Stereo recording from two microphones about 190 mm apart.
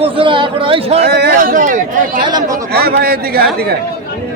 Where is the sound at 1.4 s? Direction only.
45° right (ahead or behind).